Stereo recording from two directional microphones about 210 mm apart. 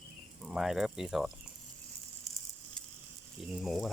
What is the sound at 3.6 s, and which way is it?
Speech, centre (ahead or behind).